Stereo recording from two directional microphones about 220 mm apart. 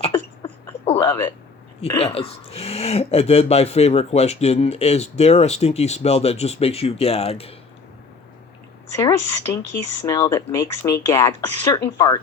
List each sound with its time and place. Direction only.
0.0 s a sound: 25° left (ahead or behind)
1.9 s speech: 25° left (ahead or behind)
9.0 s speech: 15° left (ahead or behind)